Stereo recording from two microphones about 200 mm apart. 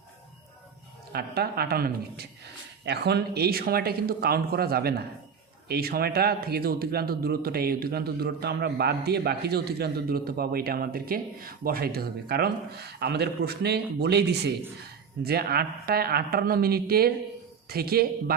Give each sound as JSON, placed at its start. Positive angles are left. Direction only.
{"t": 1.1, "sound": "speech", "side_deg": -50}